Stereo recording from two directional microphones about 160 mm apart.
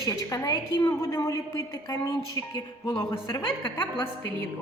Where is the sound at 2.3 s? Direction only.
25° left (ahead or behind).